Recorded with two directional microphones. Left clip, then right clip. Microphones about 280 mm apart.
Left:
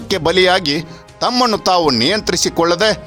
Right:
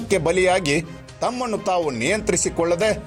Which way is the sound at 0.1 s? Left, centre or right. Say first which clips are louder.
Left 5 dB; centre.